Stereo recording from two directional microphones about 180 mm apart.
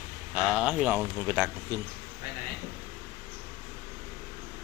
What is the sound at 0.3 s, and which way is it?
Speech, 5° right (ahead or behind).